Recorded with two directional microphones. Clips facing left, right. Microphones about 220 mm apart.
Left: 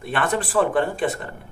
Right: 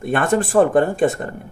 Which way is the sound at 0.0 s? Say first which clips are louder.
Right 6 dB; 45° right (ahead or behind).